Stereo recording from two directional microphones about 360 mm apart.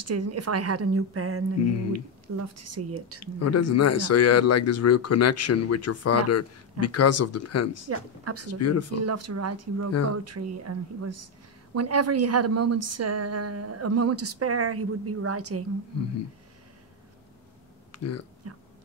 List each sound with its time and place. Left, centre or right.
0.0 s a woman's voice: right
3.3 s speech: left
7.9 s a woman's voice: right
8.5 s speech: left
9.0 s a woman's voice: right
17.9 s speech: left
18.4 s a sound: right